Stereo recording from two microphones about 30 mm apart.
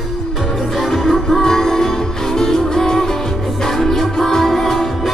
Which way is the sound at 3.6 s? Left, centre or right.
Centre.